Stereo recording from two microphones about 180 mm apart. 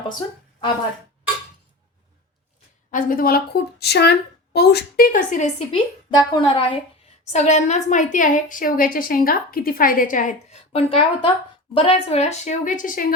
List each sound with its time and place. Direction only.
2.9 s a woman's voice: 50° left (ahead or behind)
5.7 s a woman's voice: 25° left (ahead or behind)
7.3 s a woman's voice: 40° left (ahead or behind)